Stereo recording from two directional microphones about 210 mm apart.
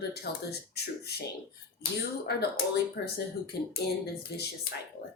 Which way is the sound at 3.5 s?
50° left (ahead or behind).